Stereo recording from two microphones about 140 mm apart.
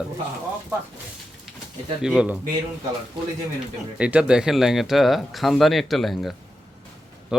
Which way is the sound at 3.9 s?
10° right (ahead or behind).